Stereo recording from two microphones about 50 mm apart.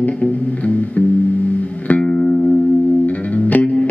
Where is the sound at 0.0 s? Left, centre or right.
Left.